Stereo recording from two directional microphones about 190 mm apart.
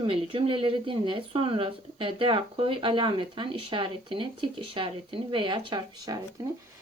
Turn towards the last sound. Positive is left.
turn(degrees=-20)  # may be behind; listen again after turning